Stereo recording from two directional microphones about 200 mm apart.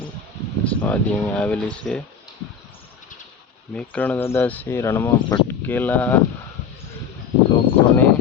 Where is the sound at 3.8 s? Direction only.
10° left (ahead or behind).